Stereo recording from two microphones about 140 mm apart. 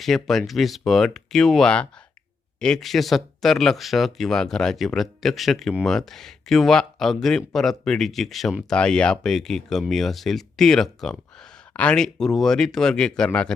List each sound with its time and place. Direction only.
0.0 s speech: centre (ahead or behind)